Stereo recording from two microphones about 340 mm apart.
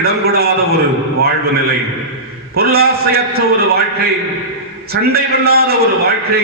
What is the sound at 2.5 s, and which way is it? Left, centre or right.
A man's voice, right.